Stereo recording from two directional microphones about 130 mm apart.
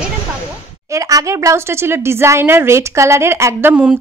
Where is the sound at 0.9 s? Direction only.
25° right (ahead or behind).